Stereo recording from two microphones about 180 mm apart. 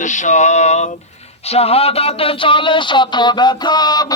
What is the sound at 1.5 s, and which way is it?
Speech, 35° left (ahead or behind).